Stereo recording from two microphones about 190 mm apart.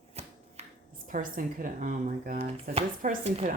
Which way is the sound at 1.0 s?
45° right (ahead or behind).